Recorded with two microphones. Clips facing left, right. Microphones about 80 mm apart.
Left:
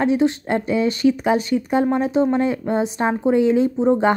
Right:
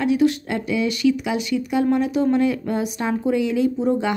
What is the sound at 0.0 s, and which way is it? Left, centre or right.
Speech, left.